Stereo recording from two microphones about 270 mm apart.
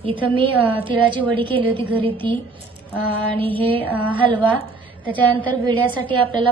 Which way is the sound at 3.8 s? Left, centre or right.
Centre.